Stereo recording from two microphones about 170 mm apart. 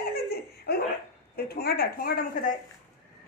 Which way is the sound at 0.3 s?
65° left (ahead or behind).